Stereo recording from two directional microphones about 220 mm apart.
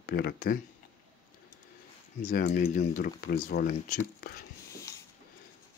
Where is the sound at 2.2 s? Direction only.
35° left (ahead or behind).